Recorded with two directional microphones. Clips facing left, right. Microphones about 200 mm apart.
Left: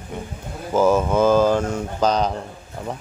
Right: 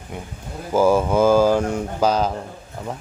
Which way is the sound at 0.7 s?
10° right (ahead or behind).